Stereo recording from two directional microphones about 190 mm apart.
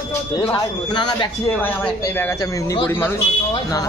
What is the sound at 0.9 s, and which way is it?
Speech, 25° left (ahead or behind).